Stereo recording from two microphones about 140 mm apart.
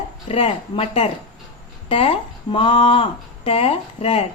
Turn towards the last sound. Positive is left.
turn(degrees=45)  # may be behind; listen again after turning